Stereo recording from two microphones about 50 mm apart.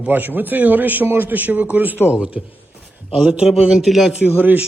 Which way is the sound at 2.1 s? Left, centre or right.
Right.